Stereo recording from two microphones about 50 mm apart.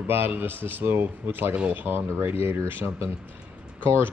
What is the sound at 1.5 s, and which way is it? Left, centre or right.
Speech, right.